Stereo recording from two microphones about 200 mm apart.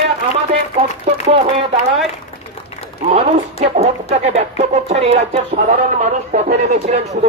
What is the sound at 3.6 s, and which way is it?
Speech, 30° right (ahead or behind).